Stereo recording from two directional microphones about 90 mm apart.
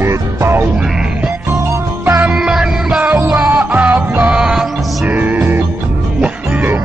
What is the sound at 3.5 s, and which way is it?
Music, 20° right (ahead or behind).